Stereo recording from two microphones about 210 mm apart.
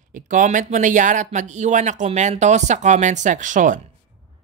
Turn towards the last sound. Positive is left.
turn(degrees=-35)  # may be behind; listen again after turning